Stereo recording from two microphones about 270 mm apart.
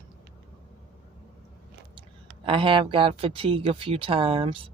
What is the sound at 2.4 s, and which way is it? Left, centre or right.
Speech, centre.